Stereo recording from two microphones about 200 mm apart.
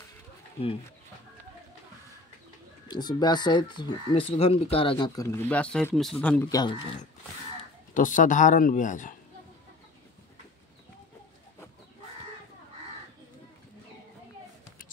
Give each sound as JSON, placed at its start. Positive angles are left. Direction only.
{"t": 2.9, "sound": "speech", "side_deg": 20}
{"t": 6.6, "sound": "speech", "side_deg": 20}
{"t": 7.9, "sound": "speech", "side_deg": 40}